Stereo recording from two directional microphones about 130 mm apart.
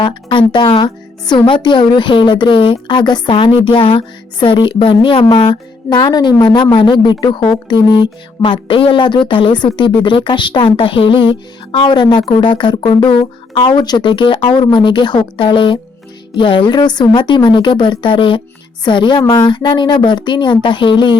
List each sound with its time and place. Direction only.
0.0 s a woman's voice: 40° left (ahead or behind)